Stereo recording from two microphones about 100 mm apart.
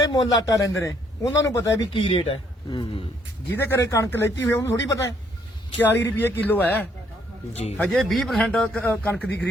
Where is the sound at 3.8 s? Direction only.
30° left (ahead or behind).